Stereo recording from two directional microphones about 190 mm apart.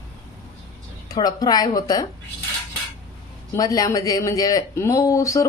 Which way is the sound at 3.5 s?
20° left (ahead or behind).